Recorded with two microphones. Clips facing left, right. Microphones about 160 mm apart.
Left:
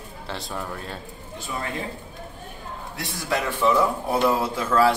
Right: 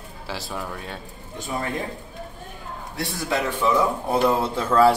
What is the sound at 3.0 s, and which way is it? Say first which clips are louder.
Speech: right 2 dB; 15° right (ahead or behind).